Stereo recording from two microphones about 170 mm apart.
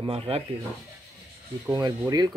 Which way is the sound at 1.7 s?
25° right (ahead or behind).